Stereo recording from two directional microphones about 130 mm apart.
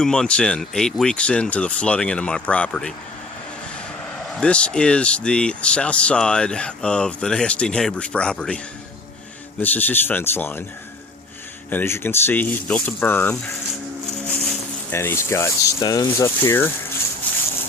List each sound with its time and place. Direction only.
0.0 s speech: 5° left (ahead or behind)
4.4 s speech: 10° left (ahead or behind)
11.7 s speech: 15° left (ahead or behind)
14.9 s speech: 20° left (ahead or behind)